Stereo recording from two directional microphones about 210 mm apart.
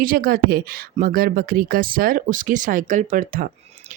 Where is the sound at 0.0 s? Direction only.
40° right (ahead or behind).